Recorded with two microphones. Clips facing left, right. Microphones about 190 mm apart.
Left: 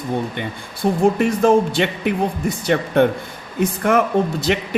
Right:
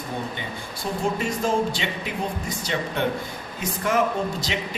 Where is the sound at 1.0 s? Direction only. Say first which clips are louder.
Left 9 dB; 55° left (ahead or behind).